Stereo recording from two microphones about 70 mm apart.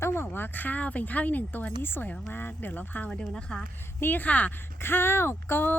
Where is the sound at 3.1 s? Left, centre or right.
Centre.